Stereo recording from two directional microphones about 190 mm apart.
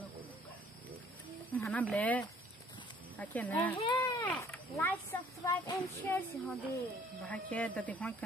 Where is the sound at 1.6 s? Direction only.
5° left (ahead or behind).